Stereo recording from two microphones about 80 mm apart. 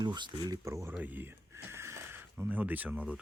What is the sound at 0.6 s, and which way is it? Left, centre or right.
Speech, right.